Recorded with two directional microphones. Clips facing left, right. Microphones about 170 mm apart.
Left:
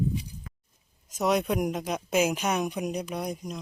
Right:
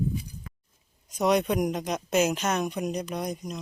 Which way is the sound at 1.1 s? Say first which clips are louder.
Right 2 dB; 5° left (ahead or behind).